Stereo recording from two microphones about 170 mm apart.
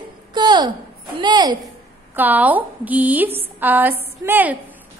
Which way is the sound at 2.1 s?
10° right (ahead or behind).